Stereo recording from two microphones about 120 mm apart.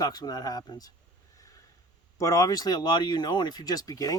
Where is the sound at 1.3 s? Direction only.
25° left (ahead or behind).